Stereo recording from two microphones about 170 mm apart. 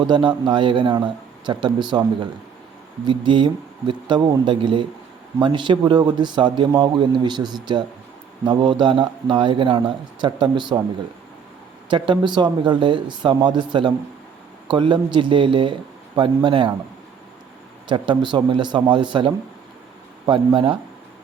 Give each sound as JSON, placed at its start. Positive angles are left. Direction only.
{"t": 0.0, "sound": "a man's voice", "side_deg": -30}
{"t": 3.1, "sound": "a man's voice", "side_deg": -30}
{"t": 11.9, "sound": "a man's voice", "side_deg": -30}
{"t": 17.8, "sound": "a man's voice", "side_deg": -25}